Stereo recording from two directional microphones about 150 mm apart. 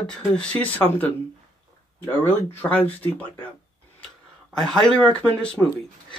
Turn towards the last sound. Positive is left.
turn(degrees=10)  # may be behind; listen again after turning